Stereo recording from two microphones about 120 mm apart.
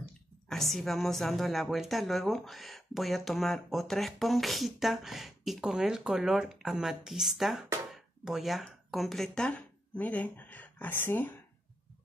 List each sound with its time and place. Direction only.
0.5 s a woman's voice: centre (ahead or behind)
7.9 s a sound: 5° right (ahead or behind)
8.6 s speech: centre (ahead or behind); by 11.4 s 15° left (ahead or behind)